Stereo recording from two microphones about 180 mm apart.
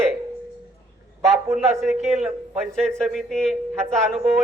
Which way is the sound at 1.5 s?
Centre (ahead or behind).